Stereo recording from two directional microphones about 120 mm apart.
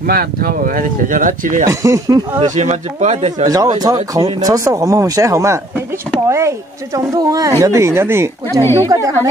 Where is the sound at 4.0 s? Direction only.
60° right (ahead or behind).